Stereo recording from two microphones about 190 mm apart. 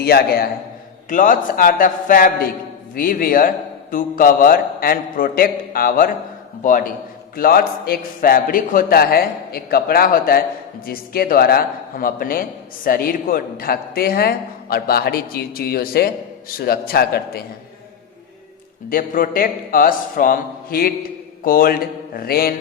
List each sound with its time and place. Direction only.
0.0 s a man's voice: 55° left (ahead or behind)
1.1 s a man's voice: 45° left (ahead or behind)
18.9 s a man's voice: 45° left (ahead or behind)